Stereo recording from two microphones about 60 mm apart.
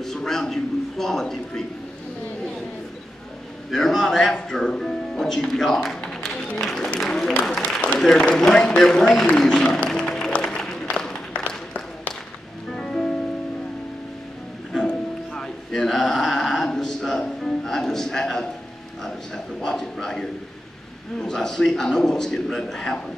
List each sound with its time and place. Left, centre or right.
0.0 s a man's voice: centre
3.7 s speech: centre
6.4 s music: centre
6.7 s a man's voice: centre
9.3 s music: centre
10.3 s a sound: centre
12.7 s music: centre
14.9 s music: centre
19.0 s a sound: centre
21.2 s a man's voice: centre